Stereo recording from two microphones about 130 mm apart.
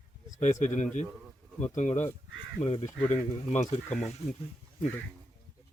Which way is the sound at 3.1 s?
65° left (ahead or behind).